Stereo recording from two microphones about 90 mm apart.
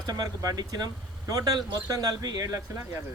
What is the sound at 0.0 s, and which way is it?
Speech, 45° right (ahead or behind).